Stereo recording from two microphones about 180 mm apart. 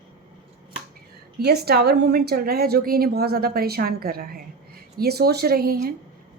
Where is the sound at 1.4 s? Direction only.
60° right (ahead or behind).